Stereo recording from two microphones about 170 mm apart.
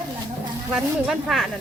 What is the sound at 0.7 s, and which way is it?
Stir, centre (ahead or behind).